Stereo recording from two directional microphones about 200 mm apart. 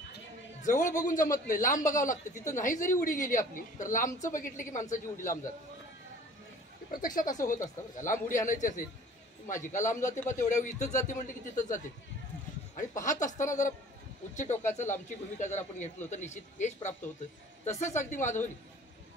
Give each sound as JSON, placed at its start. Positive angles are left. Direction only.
{"t": 0.6, "sound": "speech", "side_deg": 40}
{"t": 6.9, "sound": "speech", "side_deg": 45}